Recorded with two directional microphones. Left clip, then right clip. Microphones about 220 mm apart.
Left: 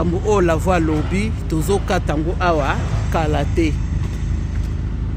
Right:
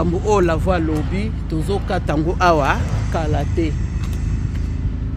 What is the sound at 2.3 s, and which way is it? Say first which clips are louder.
Speech: right 4 dB; 20° right (ahead or behind).